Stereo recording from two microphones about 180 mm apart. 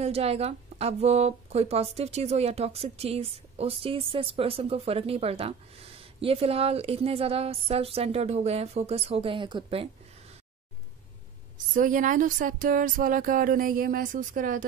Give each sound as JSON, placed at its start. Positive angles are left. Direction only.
{"t": 0.0, "sound": "speech", "side_deg": -35}
{"t": 11.5, "sound": "speech", "side_deg": -45}